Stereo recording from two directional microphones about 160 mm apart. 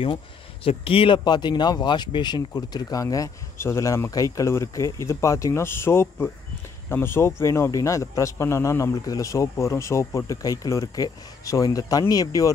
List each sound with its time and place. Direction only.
0.7 s speech: 35° left (ahead or behind)